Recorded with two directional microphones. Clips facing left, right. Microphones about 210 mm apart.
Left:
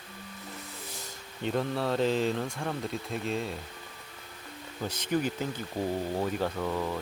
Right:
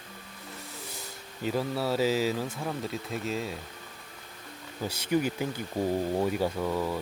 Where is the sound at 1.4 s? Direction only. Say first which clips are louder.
Even; 5° right (ahead or behind).